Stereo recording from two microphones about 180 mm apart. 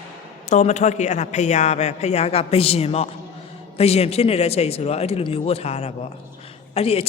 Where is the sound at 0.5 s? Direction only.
40° left (ahead or behind).